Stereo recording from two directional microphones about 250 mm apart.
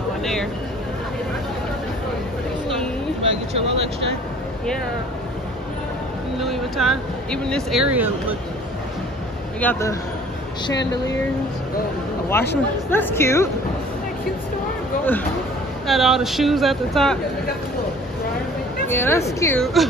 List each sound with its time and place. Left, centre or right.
0.2 s a sound: centre
3.2 s vehicle: right
6.4 s speech: centre
9.6 s speech: centre
12.3 s speech: centre
15.9 s speech: centre
18.9 s speech: centre
19.6 s speech: centre